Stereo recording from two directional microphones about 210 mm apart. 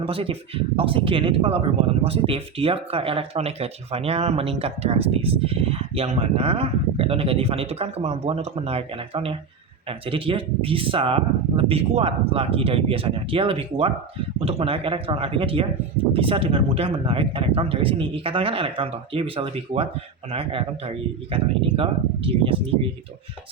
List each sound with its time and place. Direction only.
0.0 s speech: 25° right (ahead or behind)